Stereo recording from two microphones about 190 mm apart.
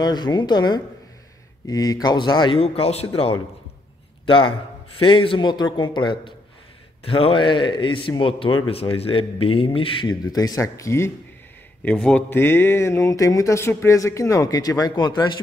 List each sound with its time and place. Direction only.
0.0 s a man's voice: 20° left (ahead or behind)